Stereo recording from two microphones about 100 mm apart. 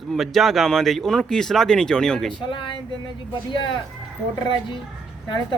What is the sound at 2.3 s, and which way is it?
A woman's voice, 55° left (ahead or behind).